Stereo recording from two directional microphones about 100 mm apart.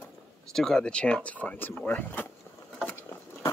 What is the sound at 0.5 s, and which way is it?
Speech, 5° left (ahead or behind).